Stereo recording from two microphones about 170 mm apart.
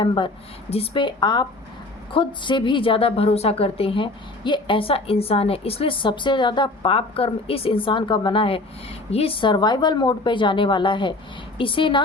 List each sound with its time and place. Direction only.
0.0 s a woman's voice: 30° left (ahead or behind)